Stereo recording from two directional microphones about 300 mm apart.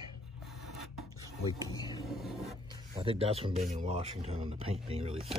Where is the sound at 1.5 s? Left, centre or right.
Centre.